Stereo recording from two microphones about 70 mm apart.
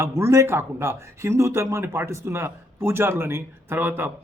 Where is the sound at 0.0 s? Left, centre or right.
Right.